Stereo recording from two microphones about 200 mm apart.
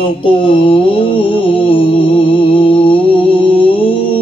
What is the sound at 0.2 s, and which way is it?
Mantra, 25° left (ahead or behind).